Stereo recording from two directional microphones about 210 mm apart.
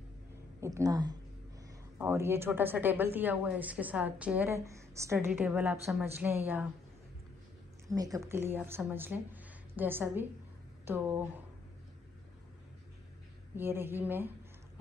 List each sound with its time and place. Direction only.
0.6 s a woman's voice: 15° right (ahead or behind)
7.9 s a woman's voice: 15° right (ahead or behind)
13.6 s a woman's voice: 10° right (ahead or behind)